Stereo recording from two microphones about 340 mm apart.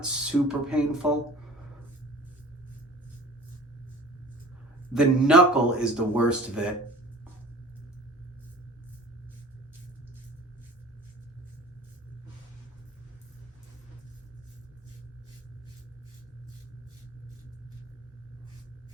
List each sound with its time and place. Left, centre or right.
0.0 s speech: centre
4.9 s speech: centre